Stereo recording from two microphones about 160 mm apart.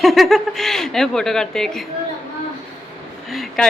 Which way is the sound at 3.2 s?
Centre (ahead or behind).